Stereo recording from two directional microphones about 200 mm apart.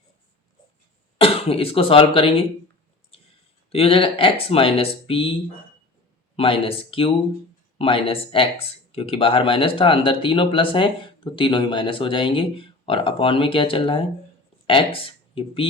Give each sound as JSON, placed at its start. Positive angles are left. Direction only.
{"t": 1.2, "sound": "speech", "side_deg": 30}
{"t": 3.1, "sound": "clicking", "side_deg": 30}
{"t": 3.7, "sound": "speech", "side_deg": 30}
{"t": 6.3, "sound": "speech", "side_deg": 25}